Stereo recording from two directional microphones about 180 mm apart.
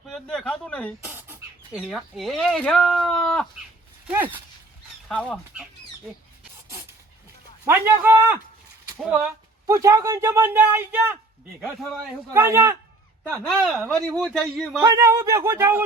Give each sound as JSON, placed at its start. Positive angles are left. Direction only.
{"t": 0.1, "sound": "speech", "side_deg": 5}
{"t": 1.0, "sound": "bird", "side_deg": -10}
{"t": 1.9, "sound": "speech", "side_deg": 0}
{"t": 4.0, "sound": "speech", "side_deg": -10}
{"t": 5.0, "sound": "speech", "side_deg": 0}
{"t": 7.6, "sound": "speech", "side_deg": -10}
{"t": 9.6, "sound": "speech", "side_deg": -20}
{"t": 11.6, "sound": "speech", "side_deg": 0}
{"t": 12.3, "sound": "speech", "side_deg": -15}
{"t": 13.4, "sound": "speech", "side_deg": 5}
{"t": 14.8, "sound": "speech", "side_deg": -15}